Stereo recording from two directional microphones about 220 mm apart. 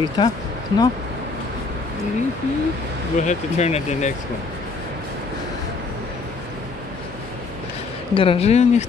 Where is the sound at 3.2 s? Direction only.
30° left (ahead or behind).